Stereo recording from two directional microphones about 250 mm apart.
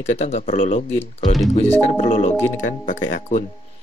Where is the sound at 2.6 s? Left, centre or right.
Left.